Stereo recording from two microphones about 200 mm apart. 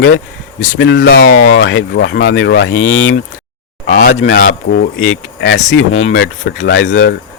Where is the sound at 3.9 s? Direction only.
60° left (ahead or behind).